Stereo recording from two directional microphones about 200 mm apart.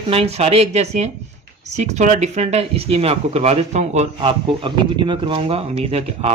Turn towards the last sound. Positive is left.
turn(degrees=-30)  # may be behind; listen again after turning